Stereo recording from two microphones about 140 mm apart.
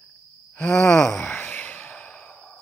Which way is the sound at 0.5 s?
10° left (ahead or behind).